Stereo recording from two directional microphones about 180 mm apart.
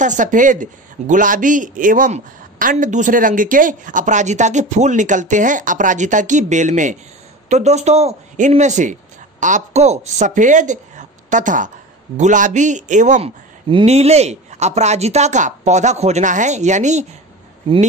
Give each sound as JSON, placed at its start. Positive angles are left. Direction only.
{"t": 0.0, "sound": "speech", "side_deg": -45}
{"t": 13.7, "sound": "speech", "side_deg": -30}